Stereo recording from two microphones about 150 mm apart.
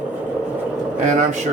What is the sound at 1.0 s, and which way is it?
Speech, 55° right (ahead or behind).